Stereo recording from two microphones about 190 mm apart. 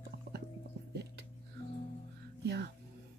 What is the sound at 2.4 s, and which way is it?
Music, 60° right (ahead or behind).